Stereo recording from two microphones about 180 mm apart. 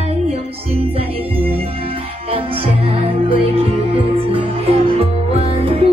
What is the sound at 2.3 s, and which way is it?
Music, 30° right (ahead or behind).